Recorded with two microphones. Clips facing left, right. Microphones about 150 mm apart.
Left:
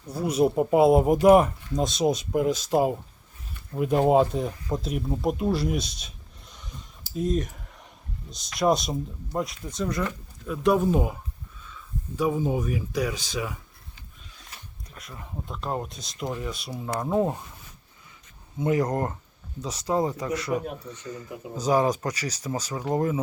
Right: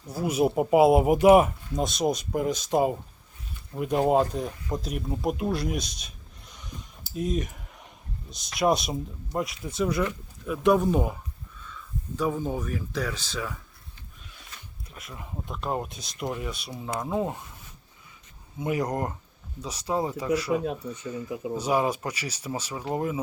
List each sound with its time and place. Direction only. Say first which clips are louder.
0.1 s speech: left 2 dB; 5° right (ahead or behind)
5.8 s a sound: left 1 dB; centre (ahead or behind)
8.5 s speech: left 1 dB; centre (ahead or behind)
14.9 s speech: even; 5° right (ahead or behind)
18.6 s speech: left 3 dB; 15° right (ahead or behind)
19.6 s speech: left 3 dB; 30° left (ahead or behind)
19.9 s speech: left 2 dB; 10° right (ahead or behind)
21.6 s speech: left 4 dB; 10° right (ahead or behind)